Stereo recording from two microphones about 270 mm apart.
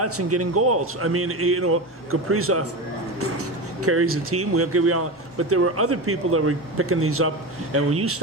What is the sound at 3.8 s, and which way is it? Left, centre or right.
A man's voice, right.